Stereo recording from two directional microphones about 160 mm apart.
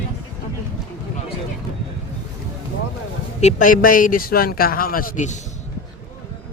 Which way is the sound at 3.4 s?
55° left (ahead or behind).